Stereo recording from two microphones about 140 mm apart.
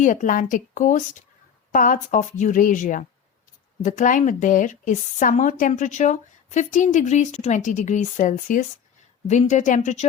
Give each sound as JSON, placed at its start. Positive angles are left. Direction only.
{"t": 0.0, "sound": "a woman's voice", "side_deg": 65}
{"t": 9.2, "sound": "a woman's voice", "side_deg": 55}